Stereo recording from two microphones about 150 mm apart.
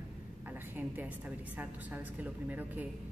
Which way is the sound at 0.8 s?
10° right (ahead or behind).